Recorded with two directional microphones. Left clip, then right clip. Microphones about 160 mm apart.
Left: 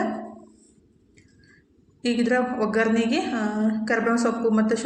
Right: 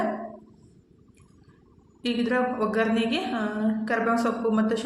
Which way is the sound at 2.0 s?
20° left (ahead or behind).